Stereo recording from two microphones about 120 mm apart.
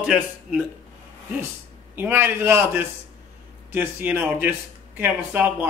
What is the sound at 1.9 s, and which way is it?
A man's voice, 20° right (ahead or behind).